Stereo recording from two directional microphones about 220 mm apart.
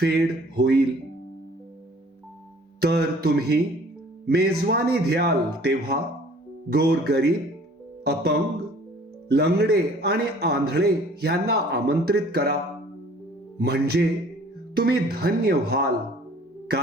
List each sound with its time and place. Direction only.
0.0 s a man's voice: 45° right (ahead or behind)
2.8 s a man's voice: 45° right (ahead or behind)
13.6 s a man's voice: 45° right (ahead or behind)